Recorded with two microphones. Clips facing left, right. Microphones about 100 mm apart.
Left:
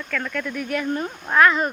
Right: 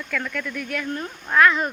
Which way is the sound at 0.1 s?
5° left (ahead or behind).